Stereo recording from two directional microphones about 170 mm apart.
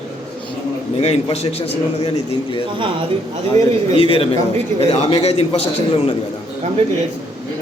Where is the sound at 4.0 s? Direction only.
35° left (ahead or behind).